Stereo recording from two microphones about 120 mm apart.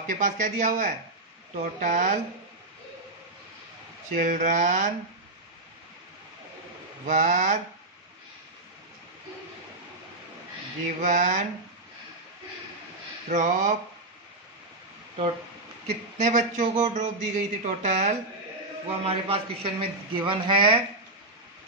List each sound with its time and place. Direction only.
0.0 s a man's voice: 90° right
4.2 s a man's voice: 90° right
7.1 s a man's voice: 90° right
11.0 s a man's voice: 90° right
13.3 s a man's voice: 90° right
15.9 s speech: 80° right
18.9 s a woman's voice: 55° right (ahead or behind)